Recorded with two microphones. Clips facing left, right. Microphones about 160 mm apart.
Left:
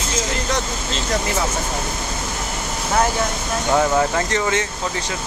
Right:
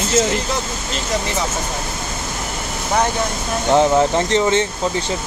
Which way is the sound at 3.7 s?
20° right (ahead or behind).